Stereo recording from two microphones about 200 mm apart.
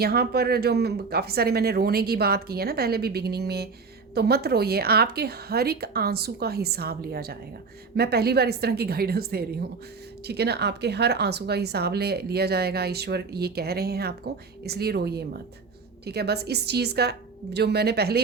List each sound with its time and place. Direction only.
0.0 s a woman's voice: 50° right (ahead or behind)